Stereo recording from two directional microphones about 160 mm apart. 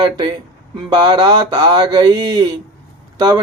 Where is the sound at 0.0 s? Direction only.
30° right (ahead or behind).